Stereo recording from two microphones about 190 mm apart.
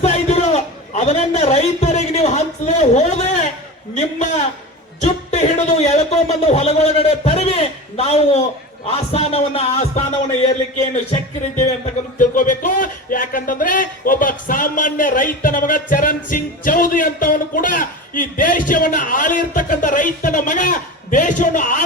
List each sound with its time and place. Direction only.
0.0 s a sound: 35° left (ahead or behind)
3.9 s music: 40° left (ahead or behind)
4.9 s speech: 35° left (ahead or behind)
8.9 s music: 30° left (ahead or behind)
12.2 s speech: 45° left (ahead or behind)